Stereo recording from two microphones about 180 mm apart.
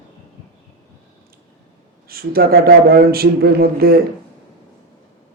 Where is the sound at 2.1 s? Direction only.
55° right (ahead or behind).